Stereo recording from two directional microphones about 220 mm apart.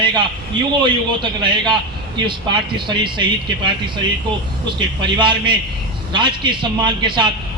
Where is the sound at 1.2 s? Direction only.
20° right (ahead or behind).